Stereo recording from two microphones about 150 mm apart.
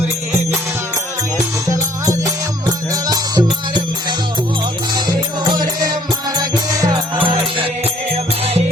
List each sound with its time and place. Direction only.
1.6 s music: 20° right (ahead or behind)
6.3 s music: 25° right (ahead or behind)